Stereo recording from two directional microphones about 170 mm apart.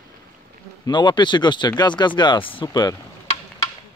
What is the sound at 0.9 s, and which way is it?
Speech, 25° left (ahead or behind).